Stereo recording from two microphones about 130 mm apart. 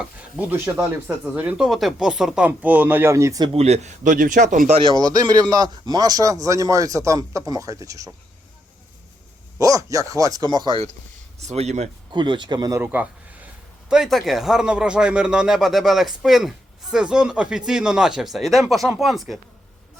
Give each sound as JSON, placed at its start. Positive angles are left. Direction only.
{"t": 0.0, "sound": "speech", "side_deg": -10}
{"t": 3.5, "sound": "speech", "side_deg": -55}
{"t": 4.8, "sound": "speech", "side_deg": -30}
{"t": 9.6, "sound": "speech", "side_deg": -25}
{"t": 11.3, "sound": "speech", "side_deg": -55}
{"t": 12.1, "sound": "speech", "side_deg": -35}
{"t": 12.8, "sound": "a man's voice", "side_deg": -15}